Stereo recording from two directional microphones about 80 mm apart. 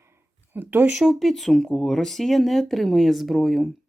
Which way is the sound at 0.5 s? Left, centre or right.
Right.